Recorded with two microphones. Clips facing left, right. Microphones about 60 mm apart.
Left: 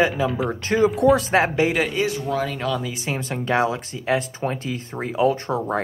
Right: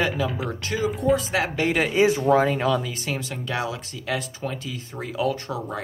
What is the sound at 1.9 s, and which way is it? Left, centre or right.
Speech, centre.